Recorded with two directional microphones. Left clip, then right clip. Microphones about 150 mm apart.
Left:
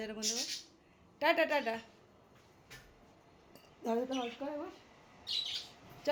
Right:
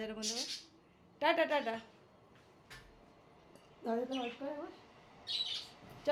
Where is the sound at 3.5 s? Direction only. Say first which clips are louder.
Left 2 dB; 20° left (ahead or behind).